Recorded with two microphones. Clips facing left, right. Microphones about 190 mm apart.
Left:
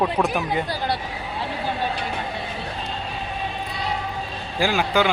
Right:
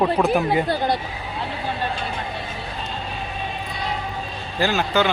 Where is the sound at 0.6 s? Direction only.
25° right (ahead or behind).